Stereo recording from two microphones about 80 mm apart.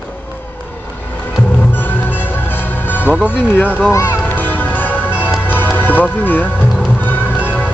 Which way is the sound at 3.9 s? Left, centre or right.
Left.